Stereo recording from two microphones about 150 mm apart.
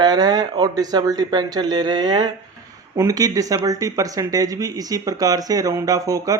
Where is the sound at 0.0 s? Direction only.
25° right (ahead or behind).